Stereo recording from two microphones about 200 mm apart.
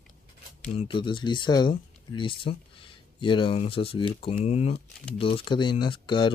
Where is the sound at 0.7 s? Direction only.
25° left (ahead or behind).